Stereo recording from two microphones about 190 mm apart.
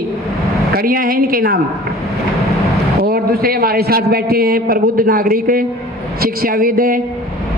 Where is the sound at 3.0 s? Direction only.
50° right (ahead or behind).